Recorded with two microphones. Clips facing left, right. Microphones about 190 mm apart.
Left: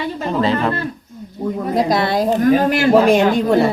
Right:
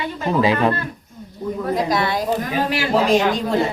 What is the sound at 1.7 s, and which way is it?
A woman's voice, 35° left (ahead or behind).